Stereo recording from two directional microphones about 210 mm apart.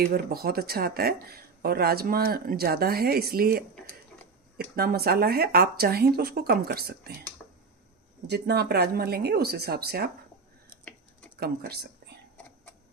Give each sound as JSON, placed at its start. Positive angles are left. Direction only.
{"t": 0.0, "sound": "speech", "side_deg": -45}
{"t": 4.7, "sound": "speech", "side_deg": -45}
{"t": 8.3, "sound": "speech", "side_deg": -50}
{"t": 10.9, "sound": "typing", "side_deg": 5}
{"t": 11.3, "sound": "speech", "side_deg": -45}